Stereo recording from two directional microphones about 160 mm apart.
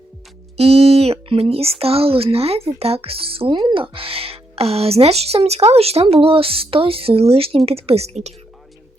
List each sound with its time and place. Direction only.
0.5 s speech: 40° right (ahead or behind)